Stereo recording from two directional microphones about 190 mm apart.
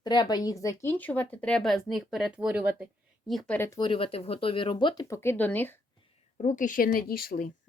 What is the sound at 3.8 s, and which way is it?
Speech, 25° left (ahead or behind).